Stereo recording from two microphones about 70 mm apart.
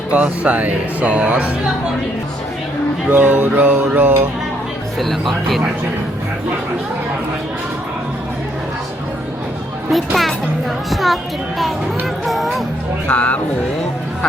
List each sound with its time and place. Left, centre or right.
0.1 s speech: centre
3.1 s speech: right
4.9 s a child's voice: centre
10.8 s a child's voice: centre
13.1 s speech: centre